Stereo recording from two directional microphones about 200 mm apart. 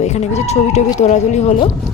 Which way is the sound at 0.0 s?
35° left (ahead or behind).